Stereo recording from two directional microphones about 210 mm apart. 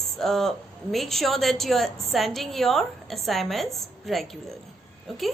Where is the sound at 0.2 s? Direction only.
Centre (ahead or behind).